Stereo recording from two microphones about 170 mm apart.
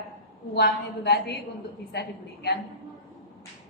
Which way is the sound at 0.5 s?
75° left (ahead or behind).